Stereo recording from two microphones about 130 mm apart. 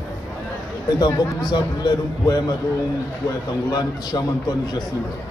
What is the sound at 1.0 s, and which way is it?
A man's voice, 30° left (ahead or behind).